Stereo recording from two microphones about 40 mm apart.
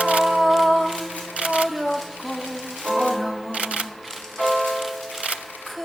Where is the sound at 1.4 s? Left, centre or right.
Right.